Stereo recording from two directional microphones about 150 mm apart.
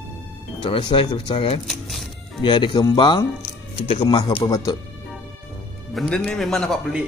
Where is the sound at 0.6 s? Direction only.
35° left (ahead or behind).